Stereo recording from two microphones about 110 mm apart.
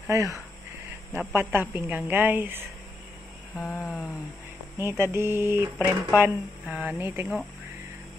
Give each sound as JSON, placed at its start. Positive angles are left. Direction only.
{"t": 0.0, "sound": "a woman's voice", "side_deg": -30}
{"t": 3.8, "sound": "a sound", "side_deg": -5}
{"t": 4.7, "sound": "a woman's voice", "side_deg": -25}